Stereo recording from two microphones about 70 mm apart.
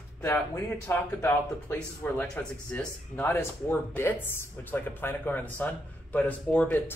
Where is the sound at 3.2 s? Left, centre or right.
Left.